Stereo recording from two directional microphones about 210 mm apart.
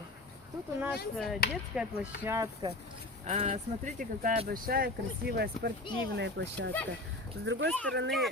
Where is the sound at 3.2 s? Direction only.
30° right (ahead or behind).